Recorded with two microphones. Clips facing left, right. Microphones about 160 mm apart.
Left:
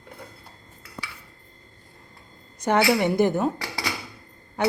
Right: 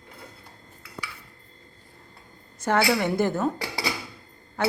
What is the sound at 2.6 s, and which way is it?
Speech, 20° left (ahead or behind).